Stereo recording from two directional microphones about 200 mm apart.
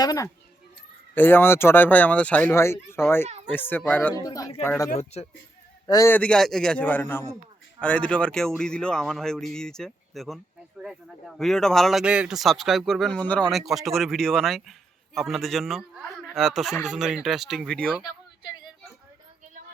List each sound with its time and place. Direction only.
0.0 s speech: 15° left (ahead or behind)
4.9 s a man's voice: 30° left (ahead or behind)
5.8 s a man's voice: 15° left (ahead or behind)